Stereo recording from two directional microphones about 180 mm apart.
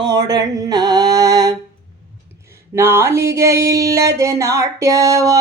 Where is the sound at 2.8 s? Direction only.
15° right (ahead or behind).